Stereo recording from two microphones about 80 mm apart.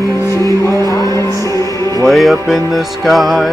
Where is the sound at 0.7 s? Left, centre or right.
Left.